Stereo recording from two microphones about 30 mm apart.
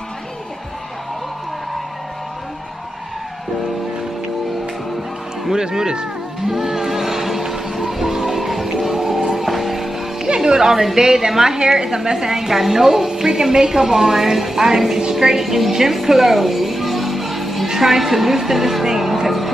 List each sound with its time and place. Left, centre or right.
5.5 s speech: right
6.5 s music: centre
10.2 s a woman's voice: right; by 15.7 s centre
15.9 s music: centre
17.6 s a woman's voice: centre